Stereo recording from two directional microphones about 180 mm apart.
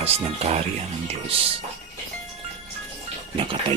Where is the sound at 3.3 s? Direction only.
30° right (ahead or behind).